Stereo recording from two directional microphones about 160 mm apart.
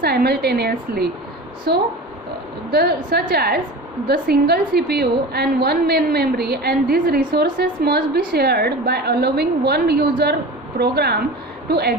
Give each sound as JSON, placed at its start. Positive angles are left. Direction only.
{"t": 0.0, "sound": "a woman's voice", "side_deg": -85}